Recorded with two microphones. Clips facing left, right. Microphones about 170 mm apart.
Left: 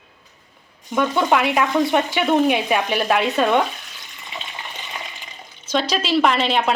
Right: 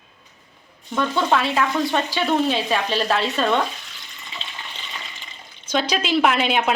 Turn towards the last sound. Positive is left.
turn(degrees=-5)  # may be behind; listen again after turning